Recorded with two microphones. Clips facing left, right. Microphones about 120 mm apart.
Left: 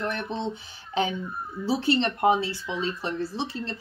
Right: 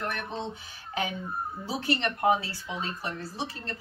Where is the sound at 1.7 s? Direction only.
25° left (ahead or behind).